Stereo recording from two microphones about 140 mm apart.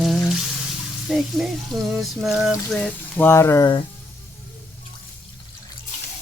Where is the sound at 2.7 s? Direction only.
10° left (ahead or behind).